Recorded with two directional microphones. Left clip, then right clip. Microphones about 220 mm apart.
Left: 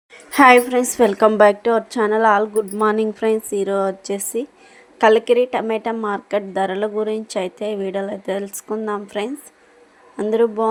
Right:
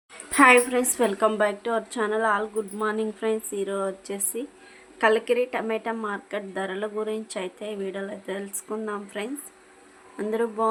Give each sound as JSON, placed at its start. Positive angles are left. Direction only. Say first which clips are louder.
{"t": 0.3, "sound": "speech", "louder": "left 6 dB", "side_deg": 20}